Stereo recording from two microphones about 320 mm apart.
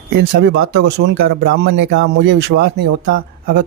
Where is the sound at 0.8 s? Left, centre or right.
Right.